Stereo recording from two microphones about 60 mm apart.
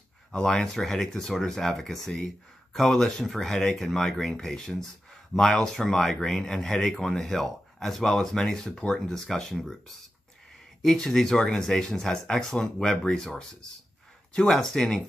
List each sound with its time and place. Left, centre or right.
0.3 s speech: centre
10.8 s speech: centre